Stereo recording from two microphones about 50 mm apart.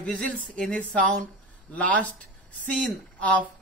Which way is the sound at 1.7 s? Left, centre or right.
Left.